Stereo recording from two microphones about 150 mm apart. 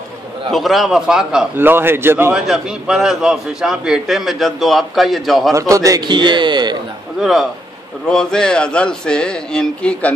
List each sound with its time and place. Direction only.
0.5 s a man's voice: centre (ahead or behind)
2.3 s a man's voice: 5° right (ahead or behind)
5.5 s a man's voice: 20° right (ahead or behind)
7.2 s a man's voice: centre (ahead or behind)